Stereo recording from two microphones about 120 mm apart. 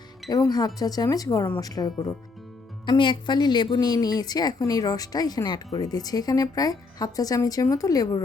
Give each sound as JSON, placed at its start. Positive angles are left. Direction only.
{"t": 0.3, "sound": "a woman's voice", "side_deg": 30}